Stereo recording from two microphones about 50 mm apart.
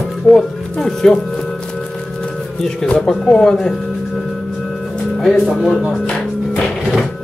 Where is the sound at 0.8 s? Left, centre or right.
Centre.